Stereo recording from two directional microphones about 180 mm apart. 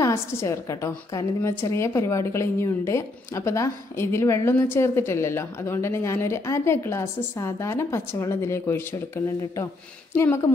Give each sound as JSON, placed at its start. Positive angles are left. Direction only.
{"t": 0.0, "sound": "a woman's voice", "side_deg": 15}